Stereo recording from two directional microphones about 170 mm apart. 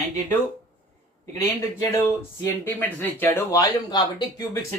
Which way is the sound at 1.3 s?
20° left (ahead or behind).